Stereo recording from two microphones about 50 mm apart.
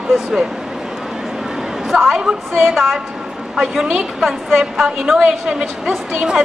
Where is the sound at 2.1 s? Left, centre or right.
Centre.